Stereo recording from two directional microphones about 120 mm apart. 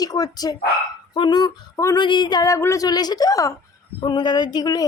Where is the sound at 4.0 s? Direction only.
40° left (ahead or behind).